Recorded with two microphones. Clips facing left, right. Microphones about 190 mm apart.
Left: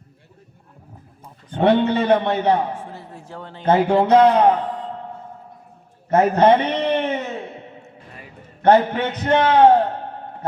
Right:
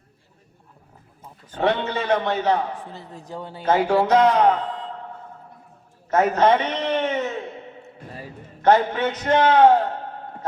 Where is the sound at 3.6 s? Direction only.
25° left (ahead or behind).